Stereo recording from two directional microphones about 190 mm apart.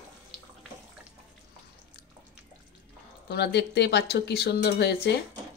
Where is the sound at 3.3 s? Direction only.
60° left (ahead or behind).